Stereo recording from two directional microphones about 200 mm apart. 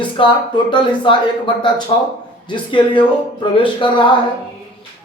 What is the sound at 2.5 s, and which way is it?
A man's voice, 25° left (ahead or behind).